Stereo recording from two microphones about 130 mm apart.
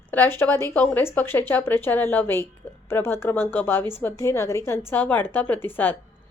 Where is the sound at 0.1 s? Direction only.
15° left (ahead or behind).